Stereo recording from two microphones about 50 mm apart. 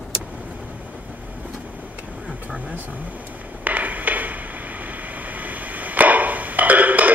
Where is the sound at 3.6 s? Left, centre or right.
Right.